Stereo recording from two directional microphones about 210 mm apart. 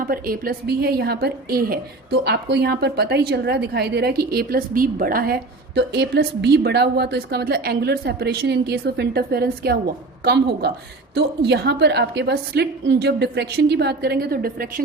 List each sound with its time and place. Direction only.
0.0 s a woman's voice: 45° right (ahead or behind)